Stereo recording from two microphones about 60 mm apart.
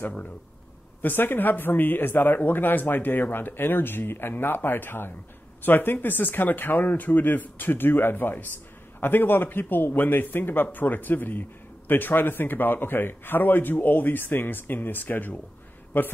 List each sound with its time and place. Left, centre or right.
0.0 s speech: left